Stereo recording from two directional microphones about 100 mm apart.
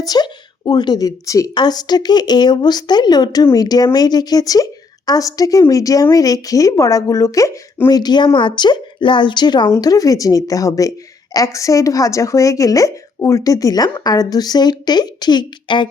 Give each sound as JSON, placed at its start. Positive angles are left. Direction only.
{"t": 0.0, "sound": "a woman's voice", "side_deg": 40}
{"t": 7.9, "sound": "a woman's voice", "side_deg": 45}